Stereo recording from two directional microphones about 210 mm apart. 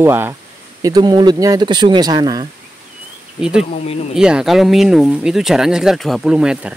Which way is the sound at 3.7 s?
30° left (ahead or behind).